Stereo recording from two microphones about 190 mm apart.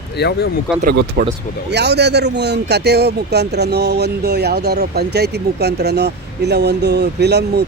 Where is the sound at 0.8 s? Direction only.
60° right (ahead or behind).